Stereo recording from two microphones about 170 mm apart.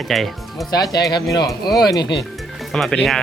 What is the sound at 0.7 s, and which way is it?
Speech, 20° left (ahead or behind).